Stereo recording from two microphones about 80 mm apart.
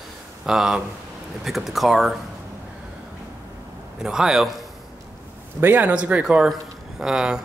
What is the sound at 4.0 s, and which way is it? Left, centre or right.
Speech, centre.